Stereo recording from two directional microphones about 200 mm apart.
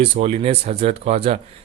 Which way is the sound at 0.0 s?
30° right (ahead or behind).